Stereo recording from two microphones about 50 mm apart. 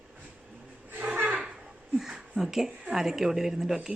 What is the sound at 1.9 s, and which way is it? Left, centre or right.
A woman's voice, centre.